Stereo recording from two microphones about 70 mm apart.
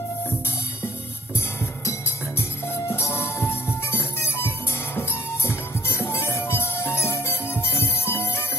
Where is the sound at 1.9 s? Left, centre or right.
Left.